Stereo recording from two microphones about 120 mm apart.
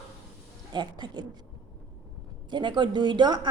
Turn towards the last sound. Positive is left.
turn(degrees=-40)  # may be behind; listen again after turning